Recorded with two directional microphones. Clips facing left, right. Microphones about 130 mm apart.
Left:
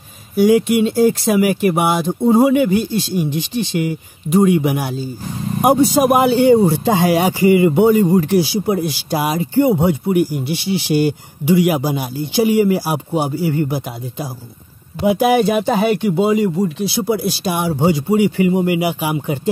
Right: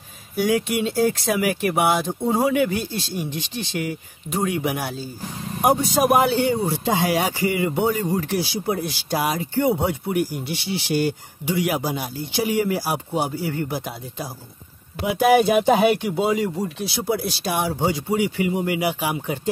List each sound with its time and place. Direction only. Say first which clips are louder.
0.4 s a man's voice: left 8 dB; 5° left (ahead or behind)
6.4 s speech: left 10 dB; 30° left (ahead or behind)
8.4 s speech: left 8 dB; 10° left (ahead or behind)
15.3 s a man's voice: left 1 dB; 5° right (ahead or behind)
17.8 s speech: left 9 dB; 20° left (ahead or behind)
18.4 s speech: left 7 dB; 30° left (ahead or behind)
18.7 s speech: left 5 dB; 10° left (ahead or behind)